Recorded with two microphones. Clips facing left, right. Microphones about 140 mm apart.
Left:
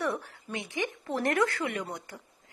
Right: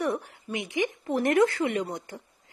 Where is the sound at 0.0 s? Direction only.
15° right (ahead or behind).